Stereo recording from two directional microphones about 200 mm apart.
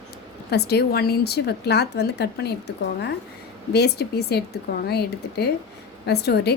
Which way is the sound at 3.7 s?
55° left (ahead or behind).